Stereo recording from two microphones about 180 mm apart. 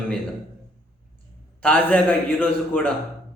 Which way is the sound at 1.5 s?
5° left (ahead or behind).